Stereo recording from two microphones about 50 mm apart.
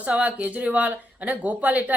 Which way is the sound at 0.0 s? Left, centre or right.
Right.